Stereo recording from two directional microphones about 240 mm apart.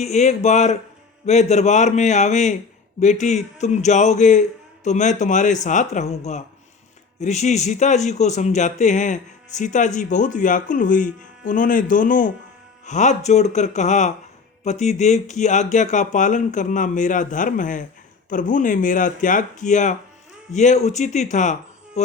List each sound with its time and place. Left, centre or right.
0.0 s a man's voice: left